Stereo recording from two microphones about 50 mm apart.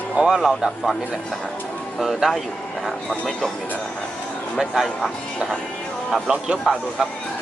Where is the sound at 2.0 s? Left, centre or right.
Centre.